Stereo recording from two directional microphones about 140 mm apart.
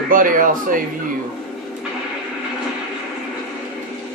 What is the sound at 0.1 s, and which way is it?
Speech, 75° right (ahead or behind).